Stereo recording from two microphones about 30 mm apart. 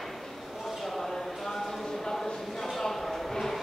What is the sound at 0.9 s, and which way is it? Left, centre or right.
Clip-clop, centre.